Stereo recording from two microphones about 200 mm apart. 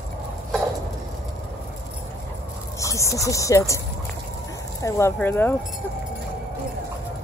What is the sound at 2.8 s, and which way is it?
Speech, 15° left (ahead or behind).